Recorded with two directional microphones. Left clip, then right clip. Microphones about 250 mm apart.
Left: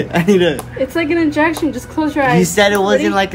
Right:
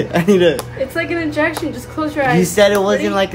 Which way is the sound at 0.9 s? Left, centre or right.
Left.